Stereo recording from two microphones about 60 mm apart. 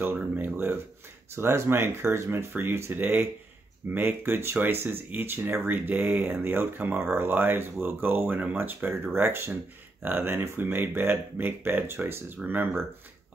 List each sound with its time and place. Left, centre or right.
0.0 s speech: right
1.3 s speech: right